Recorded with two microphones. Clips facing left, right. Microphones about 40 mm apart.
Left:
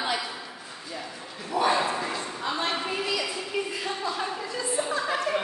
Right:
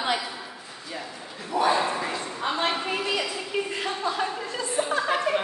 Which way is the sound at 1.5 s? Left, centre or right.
Centre.